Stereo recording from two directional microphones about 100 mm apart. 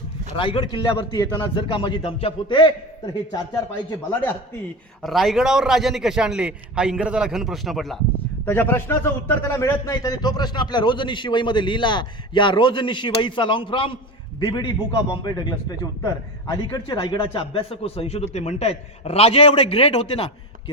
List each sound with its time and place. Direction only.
0.3 s a man's voice: 60° left (ahead or behind)
4.1 s speech: 20° left (ahead or behind)
5.0 s a man's voice: centre (ahead or behind)
8.4 s a man's voice: 20° left (ahead or behind); by 13.9 s 60° left (ahead or behind)
14.3 s a man's voice: 45° left (ahead or behind)
17.2 s a man's voice: 65° left (ahead or behind); by 20.3 s 80° left